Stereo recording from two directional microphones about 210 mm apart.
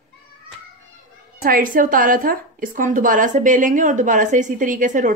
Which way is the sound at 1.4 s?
40° right (ahead or behind).